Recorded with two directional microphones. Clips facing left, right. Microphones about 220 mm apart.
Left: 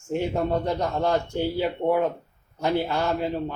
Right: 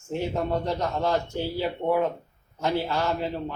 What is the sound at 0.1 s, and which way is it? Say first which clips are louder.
Speech: left 2 dB; 15° left (ahead or behind).